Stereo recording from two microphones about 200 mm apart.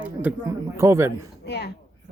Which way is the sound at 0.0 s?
5° right (ahead or behind).